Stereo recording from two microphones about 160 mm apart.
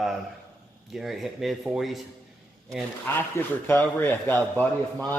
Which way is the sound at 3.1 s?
10° left (ahead or behind).